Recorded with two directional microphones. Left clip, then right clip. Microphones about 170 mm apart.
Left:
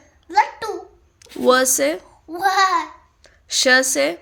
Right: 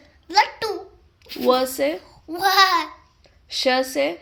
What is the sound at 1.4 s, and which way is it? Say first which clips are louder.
Speech: left 3 dB; 80° left.